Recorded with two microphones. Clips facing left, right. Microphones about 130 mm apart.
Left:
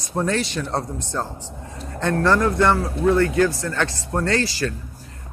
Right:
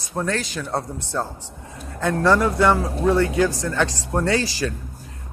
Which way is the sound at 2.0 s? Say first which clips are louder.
Even; 15° right (ahead or behind).